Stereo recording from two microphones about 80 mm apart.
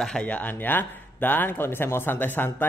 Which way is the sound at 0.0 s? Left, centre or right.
Centre.